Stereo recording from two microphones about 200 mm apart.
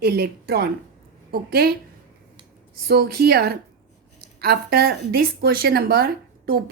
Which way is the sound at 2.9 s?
50° right (ahead or behind).